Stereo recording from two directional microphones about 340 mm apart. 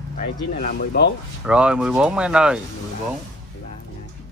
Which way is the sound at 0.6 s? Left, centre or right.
Left.